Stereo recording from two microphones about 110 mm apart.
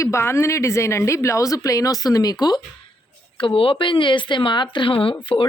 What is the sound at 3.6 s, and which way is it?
Speech, 55° left (ahead or behind).